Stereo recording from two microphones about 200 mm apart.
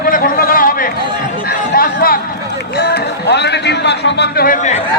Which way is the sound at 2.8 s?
55° left (ahead or behind).